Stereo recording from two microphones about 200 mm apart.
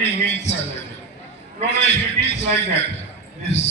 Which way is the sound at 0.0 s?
35° left (ahead or behind).